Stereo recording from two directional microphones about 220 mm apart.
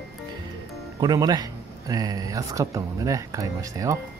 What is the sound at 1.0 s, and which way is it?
Speech, 20° right (ahead or behind).